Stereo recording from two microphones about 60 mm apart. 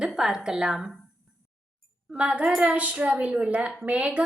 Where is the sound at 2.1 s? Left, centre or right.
Centre.